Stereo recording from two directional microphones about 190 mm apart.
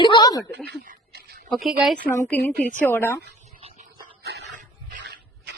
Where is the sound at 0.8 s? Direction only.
50° right (ahead or behind).